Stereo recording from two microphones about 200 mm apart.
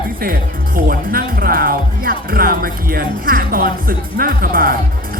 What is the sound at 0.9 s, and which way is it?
Speech, 45° right (ahead or behind).